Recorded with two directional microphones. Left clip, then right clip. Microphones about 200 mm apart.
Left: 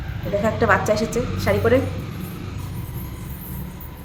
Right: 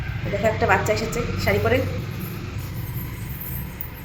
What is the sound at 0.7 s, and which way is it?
Speech, 25° left (ahead or behind).